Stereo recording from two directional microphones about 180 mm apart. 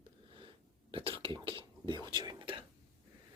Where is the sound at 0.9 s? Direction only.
30° right (ahead or behind).